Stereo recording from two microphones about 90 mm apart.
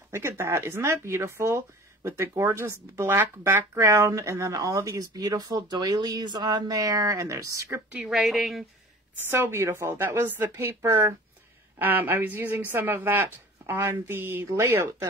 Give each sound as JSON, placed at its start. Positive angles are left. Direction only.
{"t": 0.1, "sound": "a woman's voice", "side_deg": -30}
{"t": 7.9, "sound": "speech", "side_deg": -5}
{"t": 9.3, "sound": "a woman's voice", "side_deg": -30}